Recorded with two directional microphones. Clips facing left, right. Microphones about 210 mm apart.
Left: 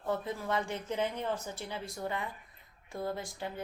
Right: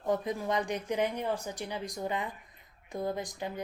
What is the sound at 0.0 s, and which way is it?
A woman's voice, 15° right (ahead or behind).